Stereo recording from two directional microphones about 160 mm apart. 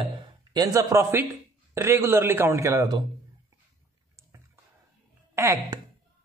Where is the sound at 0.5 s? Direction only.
20° right (ahead or behind).